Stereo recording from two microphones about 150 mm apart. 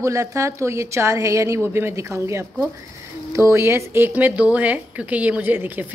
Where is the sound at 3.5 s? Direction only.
15° right (ahead or behind).